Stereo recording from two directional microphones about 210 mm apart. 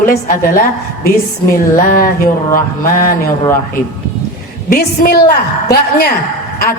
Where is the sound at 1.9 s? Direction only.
40° left (ahead or behind).